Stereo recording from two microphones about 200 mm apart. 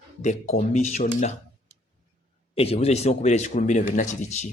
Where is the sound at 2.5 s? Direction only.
30° left (ahead or behind).